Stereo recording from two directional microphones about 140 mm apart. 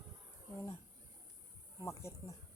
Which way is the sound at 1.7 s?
20° left (ahead or behind).